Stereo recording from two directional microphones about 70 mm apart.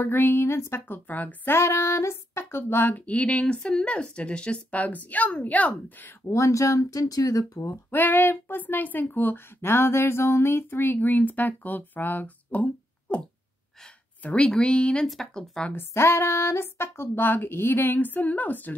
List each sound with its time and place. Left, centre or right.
0.0 s speech: left
2.9 s a sound: centre
6.2 s speech: left
7.7 s a sound: left
14.2 s speech: centre
15.0 s speech: centre
15.7 s speech: left